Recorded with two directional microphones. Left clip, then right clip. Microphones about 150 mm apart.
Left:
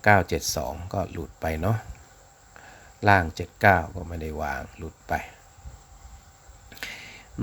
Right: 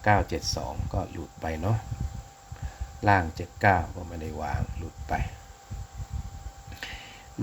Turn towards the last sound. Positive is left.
turn(degrees=30)  # may be behind; listen again after turning